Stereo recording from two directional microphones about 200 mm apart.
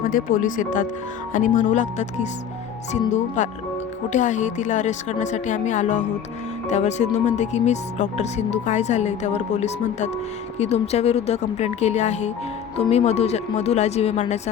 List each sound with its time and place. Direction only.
0.0 s speech: 45° left (ahead or behind)
3.1 s speech: 40° left (ahead or behind)